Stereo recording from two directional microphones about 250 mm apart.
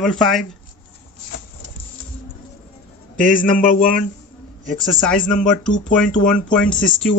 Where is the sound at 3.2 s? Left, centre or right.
Left.